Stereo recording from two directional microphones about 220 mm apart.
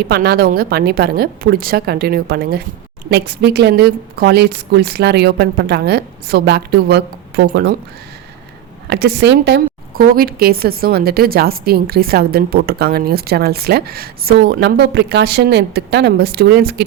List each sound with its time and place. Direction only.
0.0 s a woman's voice: 45° right (ahead or behind)
8.9 s a woman's voice: 50° right (ahead or behind)